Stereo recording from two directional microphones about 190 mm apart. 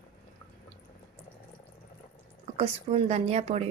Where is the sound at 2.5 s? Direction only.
30° right (ahead or behind).